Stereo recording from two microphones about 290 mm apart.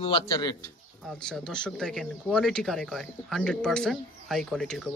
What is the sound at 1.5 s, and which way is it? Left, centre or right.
Speech, centre.